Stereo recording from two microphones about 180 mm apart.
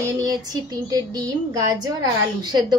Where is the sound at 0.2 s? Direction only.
20° right (ahead or behind).